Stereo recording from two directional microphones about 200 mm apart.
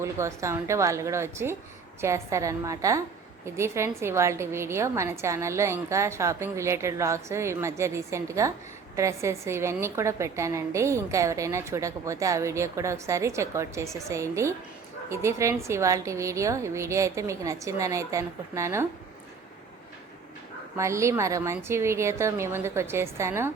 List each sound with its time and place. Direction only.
0.0 s a woman's voice: 15° right (ahead or behind)
20.7 s a woman's voice: 15° right (ahead or behind)